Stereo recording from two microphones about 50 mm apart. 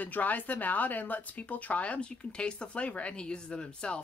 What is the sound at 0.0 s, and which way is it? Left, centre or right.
Speech, left.